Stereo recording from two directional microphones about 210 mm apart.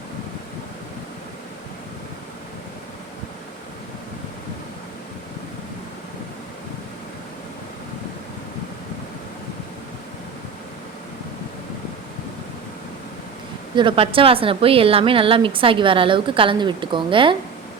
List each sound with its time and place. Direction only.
13.7 s a woman's voice: 25° right (ahead or behind)